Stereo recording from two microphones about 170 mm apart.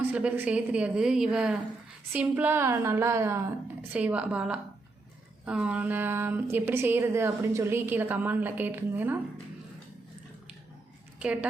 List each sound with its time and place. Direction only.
0.0 s a woman's voice: 10° right (ahead or behind)
11.2 s speech: 5° right (ahead or behind)